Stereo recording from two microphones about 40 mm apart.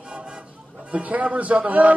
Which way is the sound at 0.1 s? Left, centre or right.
Right.